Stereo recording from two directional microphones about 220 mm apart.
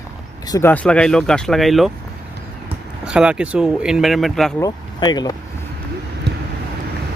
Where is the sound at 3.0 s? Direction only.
5° right (ahead or behind).